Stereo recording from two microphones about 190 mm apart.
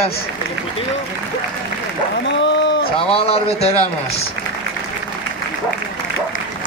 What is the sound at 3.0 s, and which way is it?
Speech, 30° left (ahead or behind).